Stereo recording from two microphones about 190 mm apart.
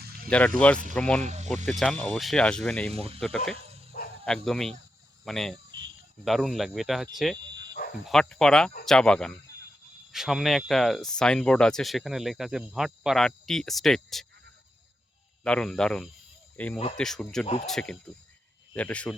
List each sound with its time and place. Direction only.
0.3 s speech: 5° left (ahead or behind)
1.2 s speech: 35° right (ahead or behind)
1.5 s speech: centre (ahead or behind)
3.9 s bow-wow: 50° left (ahead or behind)
4.3 s speech: centre (ahead or behind)
15.4 s speech: 5° left (ahead or behind)
17.4 s speech: 30° left (ahead or behind)
17.7 s speech: 5° left (ahead or behind)